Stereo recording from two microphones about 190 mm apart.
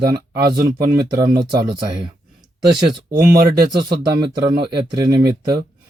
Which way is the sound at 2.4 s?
Centre (ahead or behind).